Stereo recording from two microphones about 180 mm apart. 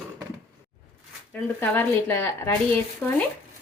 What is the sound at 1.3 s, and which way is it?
Speech, 10° left (ahead or behind).